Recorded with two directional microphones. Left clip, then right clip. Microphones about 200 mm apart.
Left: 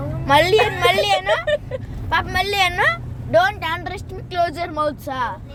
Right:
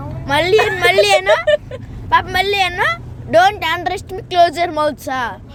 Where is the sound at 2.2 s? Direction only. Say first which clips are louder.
Right 4 dB; 35° right (ahead or behind).